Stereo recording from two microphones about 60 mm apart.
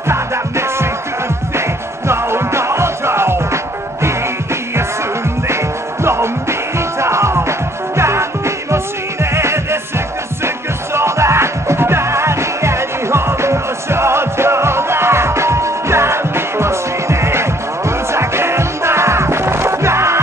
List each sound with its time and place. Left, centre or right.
0.1 s music: right
2.0 s music: right
6.0 s music: right
11.0 s music: right